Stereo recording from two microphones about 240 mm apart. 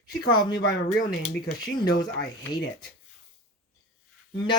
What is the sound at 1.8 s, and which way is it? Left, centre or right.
Speech, centre.